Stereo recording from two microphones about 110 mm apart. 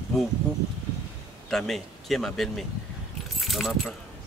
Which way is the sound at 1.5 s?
5° left (ahead or behind).